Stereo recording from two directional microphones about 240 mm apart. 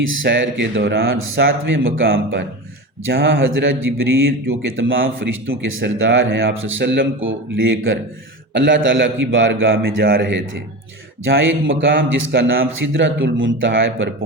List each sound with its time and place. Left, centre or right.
0.3 s a man's voice: right
12.6 s speech: right